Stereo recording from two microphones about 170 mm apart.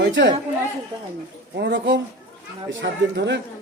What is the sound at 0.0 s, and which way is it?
Speech, 90° right.